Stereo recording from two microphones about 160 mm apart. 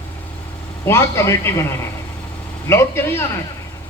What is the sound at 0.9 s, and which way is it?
Speech, 15° left (ahead or behind).